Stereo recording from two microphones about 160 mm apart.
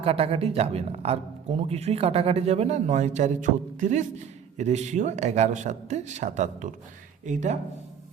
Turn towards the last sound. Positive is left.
turn(degrees=-45)  # may be behind; listen again after turning